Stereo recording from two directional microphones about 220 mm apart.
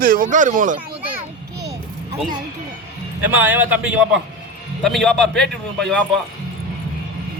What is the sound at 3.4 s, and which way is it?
A man's voice, 5° right (ahead or behind).